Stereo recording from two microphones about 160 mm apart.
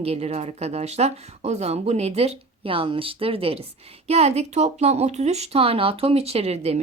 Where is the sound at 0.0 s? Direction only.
40° right (ahead or behind).